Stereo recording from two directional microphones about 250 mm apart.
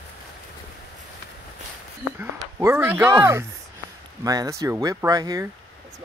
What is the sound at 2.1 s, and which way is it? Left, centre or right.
Speech, centre.